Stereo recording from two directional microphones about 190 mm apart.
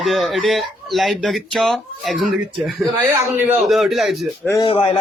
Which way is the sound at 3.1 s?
15° right (ahead or behind).